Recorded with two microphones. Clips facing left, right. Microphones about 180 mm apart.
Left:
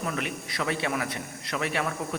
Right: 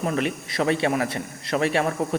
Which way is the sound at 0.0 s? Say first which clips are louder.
Right 7 dB; 30° right (ahead or behind).